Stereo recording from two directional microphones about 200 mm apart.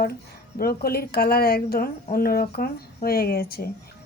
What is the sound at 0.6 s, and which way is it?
A woman's voice, 50° left (ahead or behind).